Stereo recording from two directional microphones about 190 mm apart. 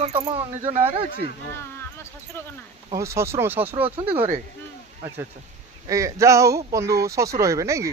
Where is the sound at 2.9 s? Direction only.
15° right (ahead or behind).